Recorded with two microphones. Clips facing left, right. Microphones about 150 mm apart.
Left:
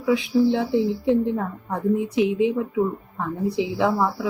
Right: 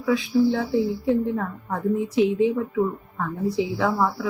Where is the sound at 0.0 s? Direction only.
20° left (ahead or behind).